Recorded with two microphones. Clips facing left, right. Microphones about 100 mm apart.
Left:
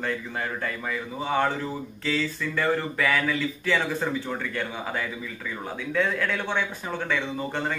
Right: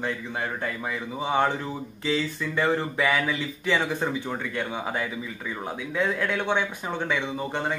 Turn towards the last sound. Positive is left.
turn(degrees=-15)  # may be behind; listen again after turning